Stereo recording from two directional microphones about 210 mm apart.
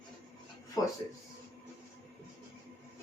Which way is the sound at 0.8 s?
15° left (ahead or behind).